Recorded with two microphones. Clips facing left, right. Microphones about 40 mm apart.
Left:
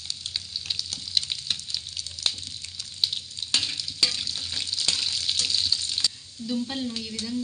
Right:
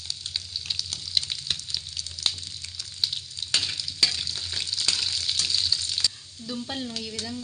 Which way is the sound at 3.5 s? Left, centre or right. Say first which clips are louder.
Even; right.